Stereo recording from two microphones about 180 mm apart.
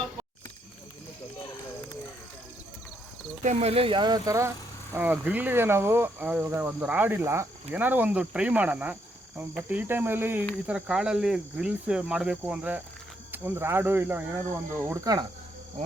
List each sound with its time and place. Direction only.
3.4 s speech: 40° right (ahead or behind); by 15.3 s 20° right (ahead or behind)